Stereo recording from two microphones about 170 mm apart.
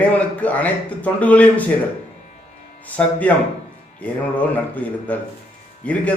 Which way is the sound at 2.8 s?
10° left (ahead or behind).